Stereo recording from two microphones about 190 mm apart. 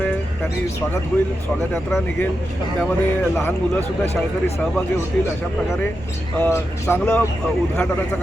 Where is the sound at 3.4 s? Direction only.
10° left (ahead or behind).